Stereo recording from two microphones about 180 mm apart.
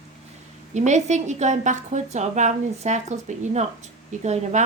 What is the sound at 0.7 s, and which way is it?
A woman's voice, 40° right (ahead or behind).